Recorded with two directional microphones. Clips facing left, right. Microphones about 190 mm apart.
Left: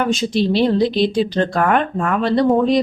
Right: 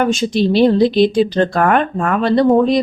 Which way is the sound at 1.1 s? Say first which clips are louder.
Right 3 dB; 50° right (ahead or behind).